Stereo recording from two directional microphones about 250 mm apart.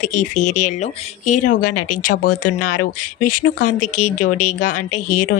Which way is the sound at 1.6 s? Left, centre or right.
Left.